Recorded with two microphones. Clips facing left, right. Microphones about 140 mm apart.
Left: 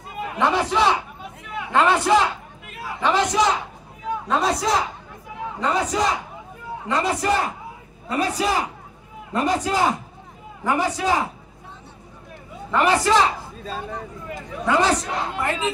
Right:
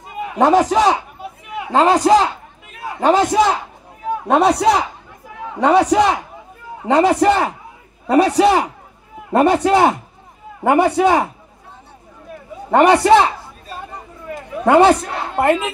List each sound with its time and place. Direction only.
0.4 s a man's voice: 45° right (ahead or behind)
3.0 s a man's voice: 50° right (ahead or behind)
4.3 s a man's voice: 65° right (ahead or behind)
12.7 s a woman's voice: 65° right (ahead or behind)
14.6 s a woman's voice: 60° right (ahead or behind)